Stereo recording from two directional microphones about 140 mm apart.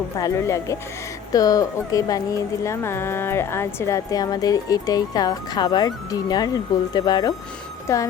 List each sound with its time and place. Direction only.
0.2 s speech: 20° left (ahead or behind)